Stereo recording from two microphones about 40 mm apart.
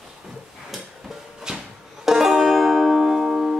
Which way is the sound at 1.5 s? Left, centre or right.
Centre.